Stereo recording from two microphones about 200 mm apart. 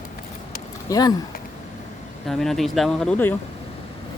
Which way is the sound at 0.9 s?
20° left (ahead or behind).